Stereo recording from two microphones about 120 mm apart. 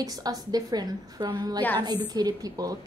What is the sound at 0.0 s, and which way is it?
A woman's voice, 30° right (ahead or behind).